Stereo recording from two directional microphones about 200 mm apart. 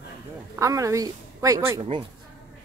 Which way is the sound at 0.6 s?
15° right (ahead or behind).